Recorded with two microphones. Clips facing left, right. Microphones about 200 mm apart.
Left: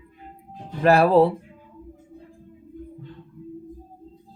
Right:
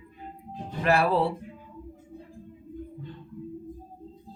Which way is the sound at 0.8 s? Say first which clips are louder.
Left 7 dB; 40° left (ahead or behind).